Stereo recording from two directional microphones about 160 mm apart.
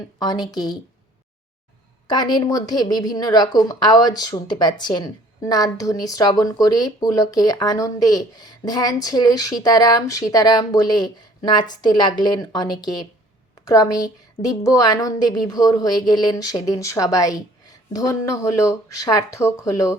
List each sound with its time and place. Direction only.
0.2 s a woman's voice: 25° left (ahead or behind)
2.0 s a woman's voice: 25° left (ahead or behind)